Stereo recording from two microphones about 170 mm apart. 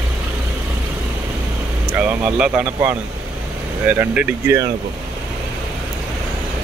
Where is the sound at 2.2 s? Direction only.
10° right (ahead or behind).